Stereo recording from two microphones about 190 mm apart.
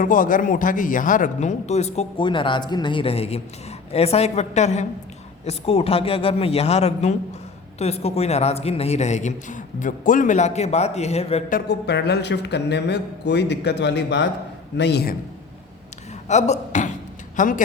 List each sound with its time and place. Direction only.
0.0 s a man's voice: 45° left (ahead or behind)
11.5 s speech: 60° left (ahead or behind)
16.3 s a man's voice: 40° left (ahead or behind)